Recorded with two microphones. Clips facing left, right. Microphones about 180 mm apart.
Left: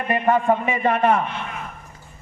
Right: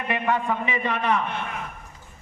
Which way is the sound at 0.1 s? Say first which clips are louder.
Left 6 dB; 45° left (ahead or behind).